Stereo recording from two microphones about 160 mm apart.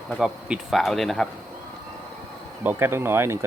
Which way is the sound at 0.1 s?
5° right (ahead or behind).